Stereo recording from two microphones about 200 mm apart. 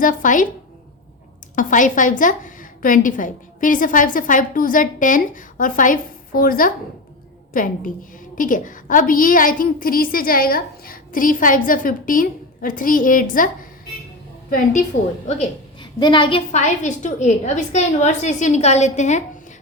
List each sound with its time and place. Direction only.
0.0 s a woman's voice: 40° left (ahead or behind)
1.5 s a woman's voice: 40° left (ahead or behind)
14.9 s a woman's voice: 40° left (ahead or behind)
15.4 s a woman's voice: 25° left (ahead or behind)
16.5 s a woman's voice: 35° left (ahead or behind)